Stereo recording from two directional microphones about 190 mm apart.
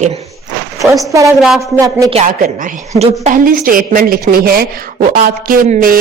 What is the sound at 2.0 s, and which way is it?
A woman's voice, 35° right (ahead or behind).